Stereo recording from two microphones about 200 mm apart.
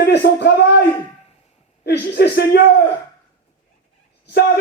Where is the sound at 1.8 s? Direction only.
50° left (ahead or behind).